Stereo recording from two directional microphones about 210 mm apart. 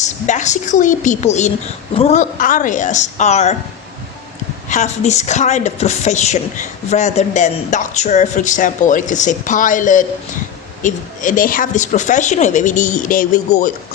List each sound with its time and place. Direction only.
0.0 s speech: 35° left (ahead or behind)
4.7 s speech: 35° left (ahead or behind)